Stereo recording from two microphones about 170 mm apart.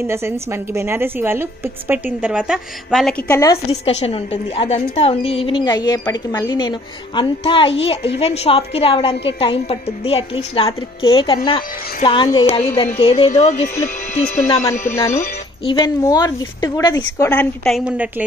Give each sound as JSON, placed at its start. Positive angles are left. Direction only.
{"t": 0.0, "sound": "a woman's voice", "side_deg": -15}
{"t": 3.3, "sound": "a woman's voice", "side_deg": 20}
{"t": 3.7, "sound": "a woman's voice", "side_deg": 35}
{"t": 15.0, "sound": "speech", "side_deg": 15}
{"t": 15.6, "sound": "a woman's voice", "side_deg": 30}
{"t": 16.0, "sound": "a woman's voice", "side_deg": 20}
{"t": 17.6, "sound": "a woman's voice", "side_deg": -5}